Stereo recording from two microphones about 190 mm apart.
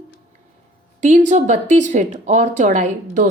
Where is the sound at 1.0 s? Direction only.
40° right (ahead or behind).